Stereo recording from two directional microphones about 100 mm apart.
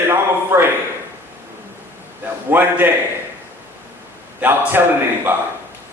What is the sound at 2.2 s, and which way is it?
Speech, 20° right (ahead or behind).